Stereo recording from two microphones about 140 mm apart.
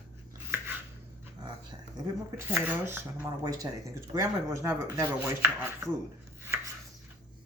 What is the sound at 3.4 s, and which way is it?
Speech, 25° right (ahead or behind).